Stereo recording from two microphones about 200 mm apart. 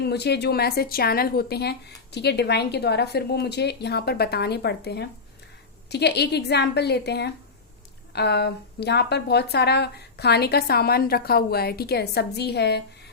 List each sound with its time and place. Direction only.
0.0 s a woman's voice: 55° left (ahead or behind)